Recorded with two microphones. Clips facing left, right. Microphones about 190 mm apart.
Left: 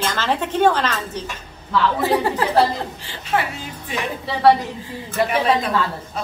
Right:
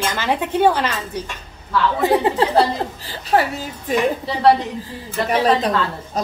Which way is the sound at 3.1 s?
40° right (ahead or behind).